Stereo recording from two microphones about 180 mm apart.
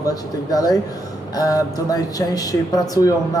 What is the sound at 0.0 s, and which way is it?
A woman's voice, 20° left (ahead or behind).